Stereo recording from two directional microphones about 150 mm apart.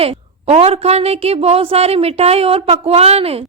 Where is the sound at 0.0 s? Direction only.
40° right (ahead or behind).